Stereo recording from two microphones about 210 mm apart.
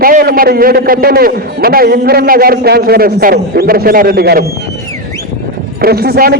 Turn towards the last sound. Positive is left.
turn(degrees=-45)  # may be behind; listen again after turning